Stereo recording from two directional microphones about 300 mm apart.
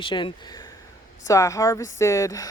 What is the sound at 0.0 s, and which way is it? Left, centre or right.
Speech, centre.